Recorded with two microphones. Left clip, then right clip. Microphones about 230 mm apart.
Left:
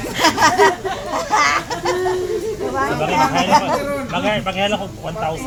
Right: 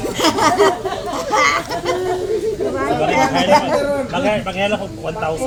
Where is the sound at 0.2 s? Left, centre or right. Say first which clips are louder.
Left 1 dB; centre.